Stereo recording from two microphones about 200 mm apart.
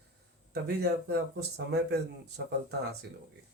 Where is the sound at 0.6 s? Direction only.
55° right (ahead or behind).